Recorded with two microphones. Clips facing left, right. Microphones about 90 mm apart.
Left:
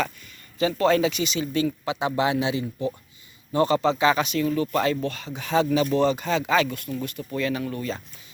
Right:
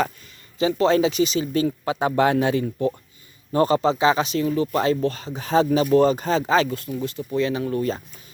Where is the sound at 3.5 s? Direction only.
40° right (ahead or behind).